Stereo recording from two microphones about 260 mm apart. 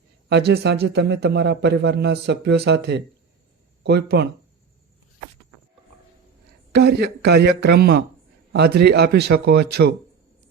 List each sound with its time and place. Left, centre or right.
0.3 s a man's voice: right
6.7 s a man's voice: right